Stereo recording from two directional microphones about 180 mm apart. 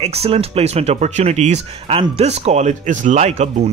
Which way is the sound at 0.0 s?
35° right (ahead or behind).